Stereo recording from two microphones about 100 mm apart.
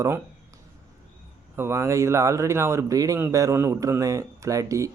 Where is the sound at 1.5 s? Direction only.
25° right (ahead or behind).